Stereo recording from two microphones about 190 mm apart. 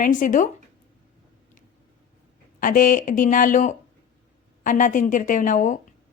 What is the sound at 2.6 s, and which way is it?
A woman's voice, 45° left (ahead or behind).